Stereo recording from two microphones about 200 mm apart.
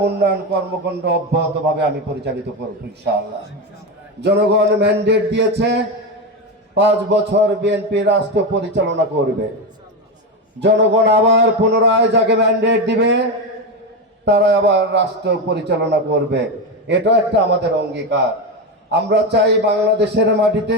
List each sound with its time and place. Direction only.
0.0 s a sound: 55° right (ahead or behind)
1.0 s a man's voice: 55° right (ahead or behind)
4.2 s a man's voice: 55° right (ahead or behind)
10.6 s a man's voice: 60° right (ahead or behind)
14.3 s a man's voice: 60° right (ahead or behind)